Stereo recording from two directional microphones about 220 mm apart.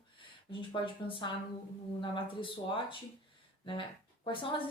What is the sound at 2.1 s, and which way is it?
Speech, 25° left (ahead or behind).